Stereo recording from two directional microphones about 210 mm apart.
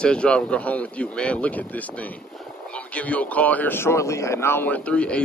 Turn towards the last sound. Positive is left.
turn(degrees=5)  # may be behind; listen again after turning